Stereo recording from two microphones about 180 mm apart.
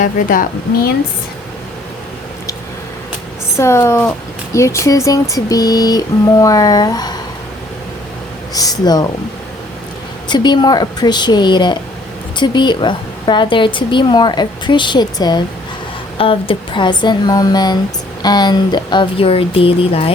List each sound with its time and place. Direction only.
0.0 s a woman's voice: 50° left (ahead or behind)
3.6 s a woman's voice: 15° left (ahead or behind)
8.5 s a woman's voice: 20° left (ahead or behind)
10.2 s a woman's voice: 25° left (ahead or behind)